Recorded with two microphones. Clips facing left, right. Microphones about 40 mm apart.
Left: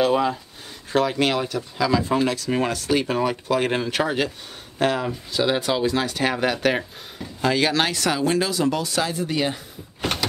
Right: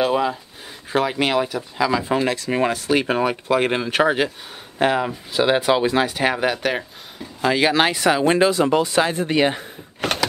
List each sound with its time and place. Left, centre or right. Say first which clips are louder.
0.0 s speech: even; centre
7.4 s speech: right 3 dB; centre; by 9.6 s right